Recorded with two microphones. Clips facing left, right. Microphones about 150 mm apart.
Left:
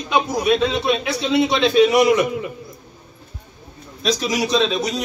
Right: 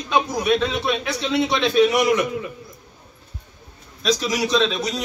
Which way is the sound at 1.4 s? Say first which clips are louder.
Left 2 dB; 30° left (ahead or behind).